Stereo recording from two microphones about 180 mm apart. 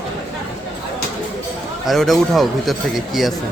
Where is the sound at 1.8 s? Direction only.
Centre (ahead or behind).